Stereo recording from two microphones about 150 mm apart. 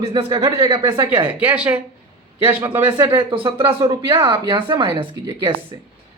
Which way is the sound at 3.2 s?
35° right (ahead or behind).